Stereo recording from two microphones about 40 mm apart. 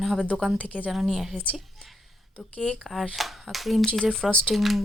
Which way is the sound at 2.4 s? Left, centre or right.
Left.